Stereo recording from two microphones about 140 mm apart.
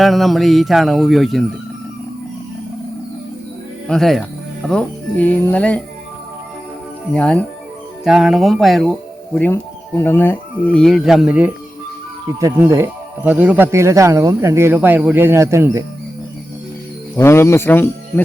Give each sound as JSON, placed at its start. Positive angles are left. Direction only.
{"t": 0.0, "sound": "speech", "side_deg": 0}
{"t": 3.8, "sound": "speech", "side_deg": 5}
{"t": 7.1, "sound": "speech", "side_deg": 5}
{"t": 8.0, "sound": "speech", "side_deg": -5}
{"t": 9.5, "sound": "speech", "side_deg": 15}
{"t": 12.4, "sound": "speech", "side_deg": -20}
{"t": 17.2, "sound": "speech", "side_deg": 20}